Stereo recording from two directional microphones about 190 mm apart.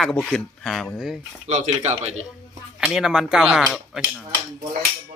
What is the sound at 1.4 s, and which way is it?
Speech, 40° right (ahead or behind).